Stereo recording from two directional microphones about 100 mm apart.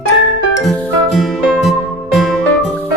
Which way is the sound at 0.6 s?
Centre (ahead or behind).